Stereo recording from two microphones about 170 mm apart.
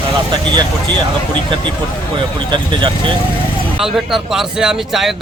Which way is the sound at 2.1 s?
30° right (ahead or behind).